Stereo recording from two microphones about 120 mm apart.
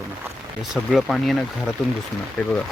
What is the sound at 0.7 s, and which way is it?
Speech, centre (ahead or behind).